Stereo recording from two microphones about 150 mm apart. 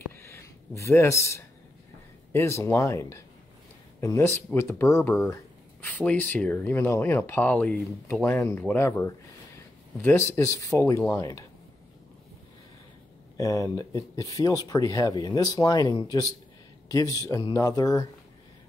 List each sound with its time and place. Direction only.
0.1 s a sound: 20° left (ahead or behind)
2.3 s speech: 20° left (ahead or behind)
13.4 s speech: 20° left (ahead or behind)